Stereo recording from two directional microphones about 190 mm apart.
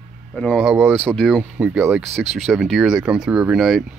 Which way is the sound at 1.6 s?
10° right (ahead or behind).